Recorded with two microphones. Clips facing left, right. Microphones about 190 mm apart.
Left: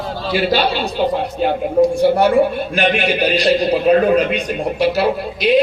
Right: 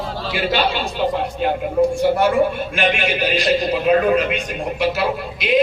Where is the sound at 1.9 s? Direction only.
40° left (ahead or behind).